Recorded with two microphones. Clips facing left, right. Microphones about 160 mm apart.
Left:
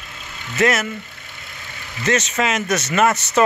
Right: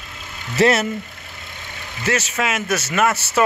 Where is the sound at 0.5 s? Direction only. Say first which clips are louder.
Right 2 dB; 30° right (ahead or behind).